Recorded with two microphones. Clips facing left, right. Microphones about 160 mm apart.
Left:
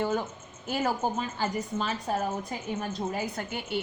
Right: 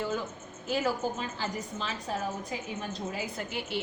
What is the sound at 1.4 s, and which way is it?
A woman's voice, 50° left (ahead or behind).